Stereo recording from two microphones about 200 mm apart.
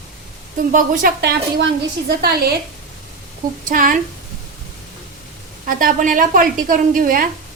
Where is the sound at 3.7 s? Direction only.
45° right (ahead or behind).